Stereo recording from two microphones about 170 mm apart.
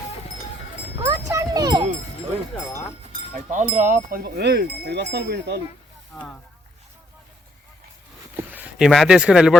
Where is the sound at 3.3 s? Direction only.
45° right (ahead or behind).